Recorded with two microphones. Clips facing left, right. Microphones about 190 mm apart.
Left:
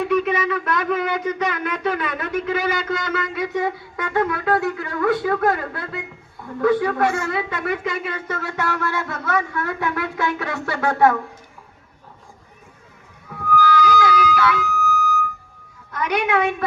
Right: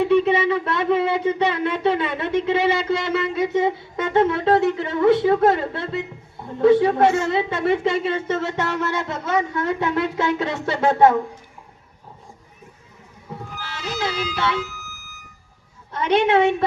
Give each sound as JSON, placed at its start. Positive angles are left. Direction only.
{"t": 0.0, "sound": "a sound", "side_deg": -30}
{"t": 13.3, "sound": "music", "side_deg": -25}
{"t": 15.9, "sound": "a woman's voice", "side_deg": -25}